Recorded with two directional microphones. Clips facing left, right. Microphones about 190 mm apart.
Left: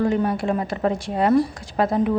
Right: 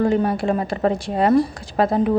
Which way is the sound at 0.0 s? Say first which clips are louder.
Right 2 dB; 35° right (ahead or behind).